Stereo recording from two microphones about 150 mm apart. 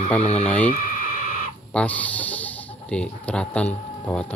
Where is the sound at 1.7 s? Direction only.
10° left (ahead or behind).